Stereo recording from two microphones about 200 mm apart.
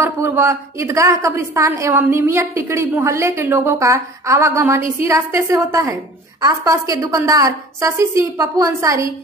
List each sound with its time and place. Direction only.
0.0 s a woman's voice: 10° right (ahead or behind)